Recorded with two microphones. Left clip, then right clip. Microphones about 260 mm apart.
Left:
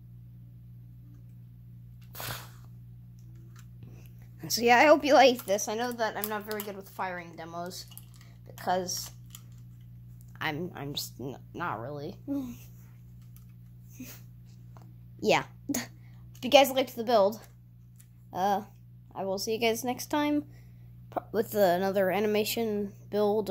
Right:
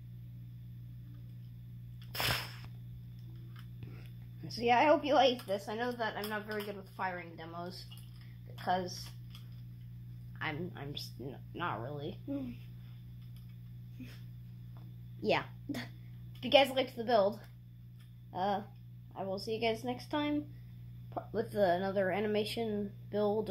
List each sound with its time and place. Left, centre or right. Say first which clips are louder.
2.1 s a sound: right 6 dB; centre
4.4 s a woman's voice: left 7 dB; left
10.4 s a woman's voice: left 6 dB; left
15.1 s a woman's voice: left 7 dB; left